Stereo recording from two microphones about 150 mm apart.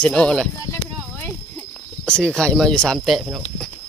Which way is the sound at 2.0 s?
5° left (ahead or behind).